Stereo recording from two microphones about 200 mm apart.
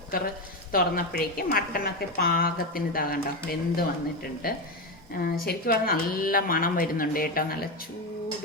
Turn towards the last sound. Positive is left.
turn(degrees=45)  # may be behind; listen again after turning